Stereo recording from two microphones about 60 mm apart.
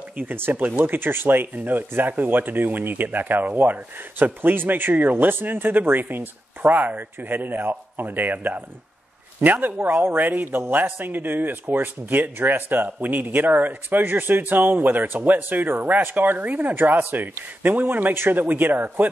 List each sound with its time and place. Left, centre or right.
0.2 s a man's voice: right
18.1 s a man's voice: right